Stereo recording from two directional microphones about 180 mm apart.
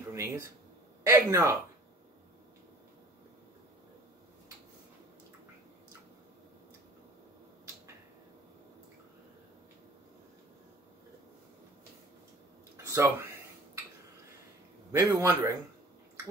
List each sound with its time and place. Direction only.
0.1 s a man's voice: 15° right (ahead or behind)
12.7 s a sound: 15° right (ahead or behind)
14.9 s a man's voice: 20° right (ahead or behind)